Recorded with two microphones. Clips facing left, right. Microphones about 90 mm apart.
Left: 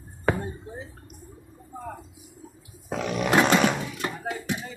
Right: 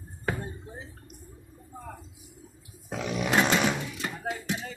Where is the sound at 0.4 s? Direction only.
15° left (ahead or behind).